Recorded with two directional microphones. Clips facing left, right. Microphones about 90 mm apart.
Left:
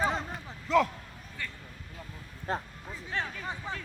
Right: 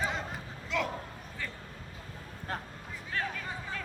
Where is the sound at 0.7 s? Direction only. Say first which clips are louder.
Left 9 dB; 40° left (ahead or behind).